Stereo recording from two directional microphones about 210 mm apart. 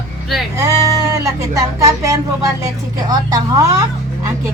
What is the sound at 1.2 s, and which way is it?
Speech, 15° right (ahead or behind).